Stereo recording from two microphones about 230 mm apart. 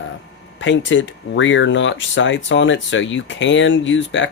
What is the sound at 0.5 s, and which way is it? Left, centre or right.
Speech, left.